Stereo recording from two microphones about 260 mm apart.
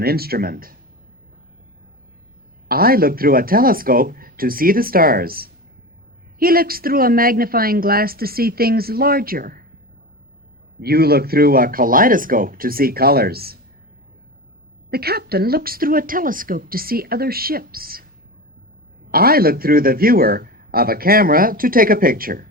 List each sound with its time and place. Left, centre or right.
0.0 s speech: right
2.6 s speech: right
10.8 s speech: right
14.8 s speech: right
19.1 s speech: right